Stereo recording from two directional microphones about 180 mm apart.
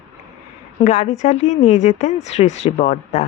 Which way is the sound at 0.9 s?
40° left (ahead or behind).